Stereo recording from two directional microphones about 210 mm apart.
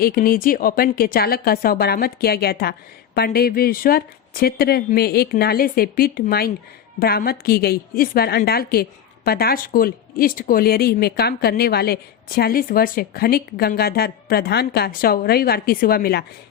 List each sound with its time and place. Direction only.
0.0 s a woman's voice: 45° left (ahead or behind)